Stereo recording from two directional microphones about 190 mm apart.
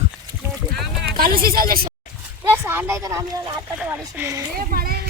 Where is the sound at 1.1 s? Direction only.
50° right (ahead or behind).